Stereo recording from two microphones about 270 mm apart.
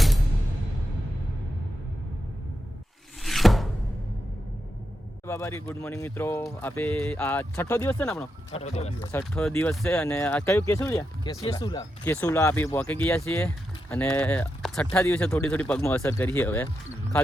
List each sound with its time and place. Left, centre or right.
3.2 s a sound: centre
5.2 s speech: centre
8.5 s speech: left
9.0 s speech: centre